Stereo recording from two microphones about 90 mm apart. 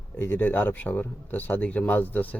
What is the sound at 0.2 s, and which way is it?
A man's voice, 25° left (ahead or behind).